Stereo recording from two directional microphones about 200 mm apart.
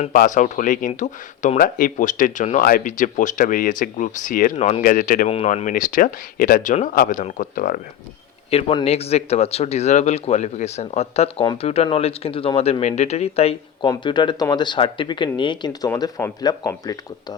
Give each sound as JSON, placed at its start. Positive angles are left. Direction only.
{"t": 0.0, "sound": "speech", "side_deg": 40}
{"t": 4.5, "sound": "speech", "side_deg": 30}
{"t": 4.8, "sound": "speech", "side_deg": 45}
{"t": 8.4, "sound": "speech", "side_deg": 30}